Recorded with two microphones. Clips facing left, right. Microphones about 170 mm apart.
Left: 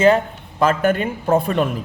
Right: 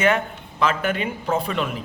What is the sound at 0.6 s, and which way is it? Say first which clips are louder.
Speech: left 5 dB; 45° left (ahead or behind).